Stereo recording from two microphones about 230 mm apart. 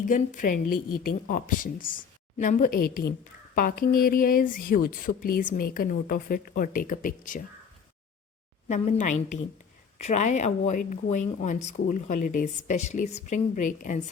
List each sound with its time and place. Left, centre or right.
0.0 s a woman's voice: left
8.6 s a woman's voice: left